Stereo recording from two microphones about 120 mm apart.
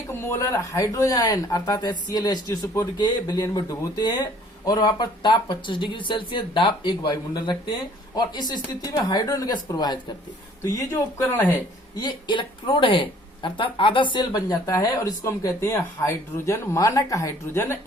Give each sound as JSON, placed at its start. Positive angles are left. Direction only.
{"t": 0.1, "sound": "speech", "side_deg": 20}
{"t": 10.9, "sound": "speech", "side_deg": 15}
{"t": 11.9, "sound": "speech", "side_deg": 40}